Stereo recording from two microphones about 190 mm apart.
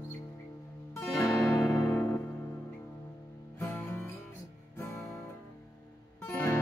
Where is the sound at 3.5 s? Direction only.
10° left (ahead or behind).